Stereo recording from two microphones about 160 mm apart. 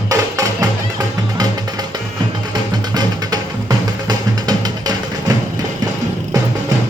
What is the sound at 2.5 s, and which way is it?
Music, 25° right (ahead or behind).